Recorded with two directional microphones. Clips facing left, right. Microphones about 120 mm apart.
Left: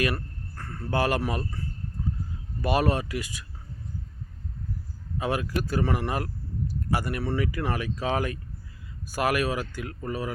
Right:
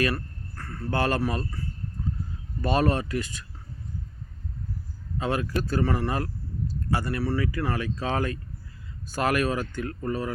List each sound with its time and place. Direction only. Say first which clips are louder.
0.0 s speech: right 1 dB; 15° left (ahead or behind)
5.1 s speech: right 1 dB; 15° left (ahead or behind)